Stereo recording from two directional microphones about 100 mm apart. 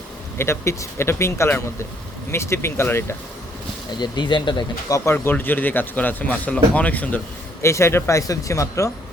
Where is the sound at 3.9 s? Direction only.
50° left (ahead or behind).